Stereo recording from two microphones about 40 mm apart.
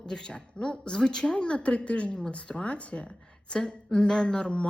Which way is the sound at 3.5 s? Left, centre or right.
Left.